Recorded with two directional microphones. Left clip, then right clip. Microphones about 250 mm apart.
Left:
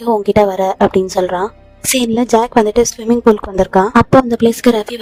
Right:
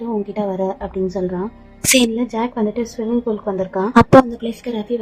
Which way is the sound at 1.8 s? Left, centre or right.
Centre.